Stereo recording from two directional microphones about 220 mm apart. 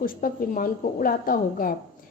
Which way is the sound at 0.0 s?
40° left (ahead or behind).